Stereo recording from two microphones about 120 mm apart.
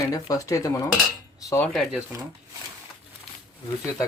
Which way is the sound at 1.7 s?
5° right (ahead or behind).